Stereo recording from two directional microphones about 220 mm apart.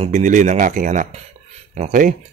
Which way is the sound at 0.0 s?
35° right (ahead or behind).